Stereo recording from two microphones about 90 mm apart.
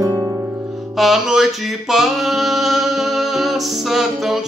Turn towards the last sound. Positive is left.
turn(degrees=-5)  # may be behind; listen again after turning